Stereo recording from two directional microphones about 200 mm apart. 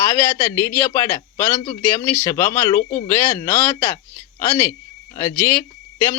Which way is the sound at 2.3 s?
15° left (ahead or behind).